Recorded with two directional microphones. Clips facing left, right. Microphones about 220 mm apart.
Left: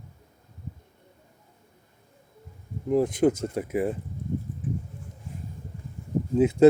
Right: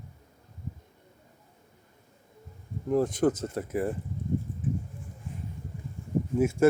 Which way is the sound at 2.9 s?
15° left (ahead or behind).